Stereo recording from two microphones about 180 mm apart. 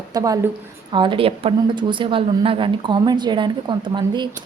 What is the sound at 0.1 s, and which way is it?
A woman's voice, 20° right (ahead or behind).